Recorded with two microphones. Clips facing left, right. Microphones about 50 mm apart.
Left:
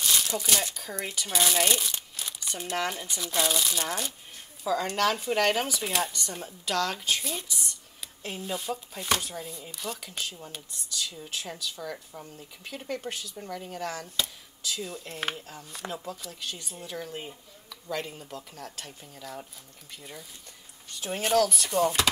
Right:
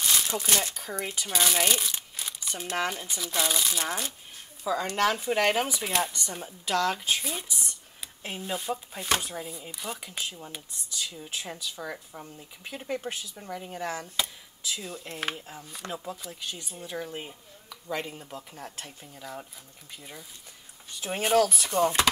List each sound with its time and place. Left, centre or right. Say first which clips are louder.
0.5 s speech: right 1 dB; right
0.7 s speech: right 1 dB; centre
2.6 s speech: right 1 dB; centre
2.9 s speech: even; centre
5.9 s speech: right 1 dB; centre